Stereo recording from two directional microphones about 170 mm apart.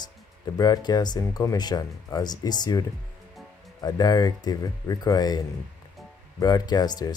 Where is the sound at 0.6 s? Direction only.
25° left (ahead or behind).